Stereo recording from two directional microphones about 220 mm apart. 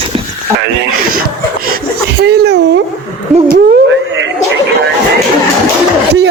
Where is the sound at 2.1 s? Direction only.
50° right (ahead or behind).